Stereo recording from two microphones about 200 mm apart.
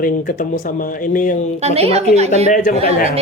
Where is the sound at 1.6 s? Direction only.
30° right (ahead or behind).